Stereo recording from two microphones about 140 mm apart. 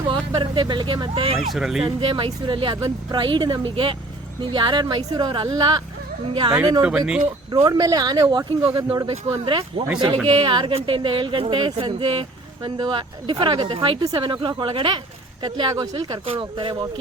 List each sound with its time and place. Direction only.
0.1 s speech: 35° right (ahead or behind)
1.4 s speech: centre (ahead or behind)
1.8 s speech: 40° right (ahead or behind)
6.8 s speech: 5° right (ahead or behind)
7.5 s speech: 30° right (ahead or behind)
16.2 s speech: 40° right (ahead or behind)